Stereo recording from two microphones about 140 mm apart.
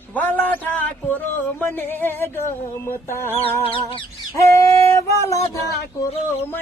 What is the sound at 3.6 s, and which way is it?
Bird, 40° left (ahead or behind).